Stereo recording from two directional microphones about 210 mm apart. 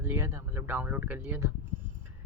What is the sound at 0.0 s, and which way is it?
Speech, 10° right (ahead or behind).